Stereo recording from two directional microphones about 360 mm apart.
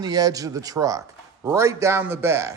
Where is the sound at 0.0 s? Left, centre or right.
Centre.